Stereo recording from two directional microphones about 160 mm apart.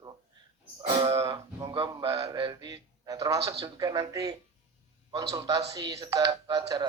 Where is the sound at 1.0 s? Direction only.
20° right (ahead or behind).